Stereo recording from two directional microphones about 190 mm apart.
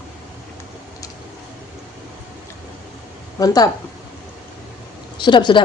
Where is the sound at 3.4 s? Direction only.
20° left (ahead or behind).